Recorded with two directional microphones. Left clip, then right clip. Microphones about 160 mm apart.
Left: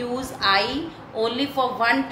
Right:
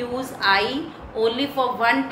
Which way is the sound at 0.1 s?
20° left (ahead or behind).